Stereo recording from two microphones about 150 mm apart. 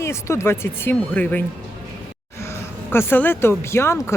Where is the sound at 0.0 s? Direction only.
20° left (ahead or behind).